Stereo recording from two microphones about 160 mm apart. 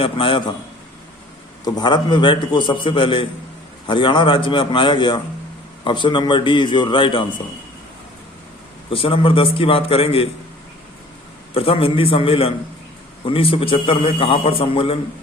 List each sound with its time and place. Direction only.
0.0 s a man's voice: 35° left (ahead or behind)
1.6 s a man's voice: 25° left (ahead or behind)
8.9 s a man's voice: 35° left (ahead or behind)
11.5 s a man's voice: 35° left (ahead or behind)